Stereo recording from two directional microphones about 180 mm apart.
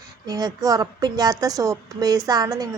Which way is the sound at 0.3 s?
20° right (ahead or behind).